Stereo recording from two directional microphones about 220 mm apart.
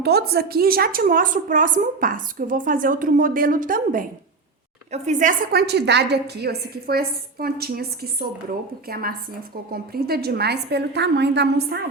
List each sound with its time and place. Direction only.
0.0 s a woman's voice: 45° right (ahead or behind)